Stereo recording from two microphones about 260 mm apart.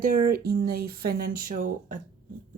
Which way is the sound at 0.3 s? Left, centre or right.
Right.